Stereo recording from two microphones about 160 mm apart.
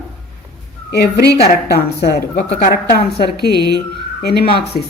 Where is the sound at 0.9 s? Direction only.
90° left.